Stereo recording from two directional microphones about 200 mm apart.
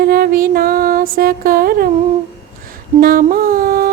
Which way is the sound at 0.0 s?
50° right (ahead or behind).